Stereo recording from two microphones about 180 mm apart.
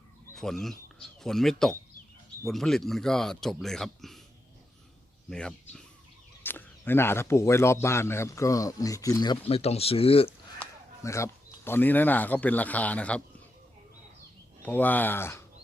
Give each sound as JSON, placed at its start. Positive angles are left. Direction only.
{"t": 0.3, "sound": "speech", "side_deg": 0}
{"t": 5.3, "sound": "speech", "side_deg": 5}
{"t": 10.6, "sound": "speech", "side_deg": 15}
{"t": 14.6, "sound": "speech", "side_deg": 10}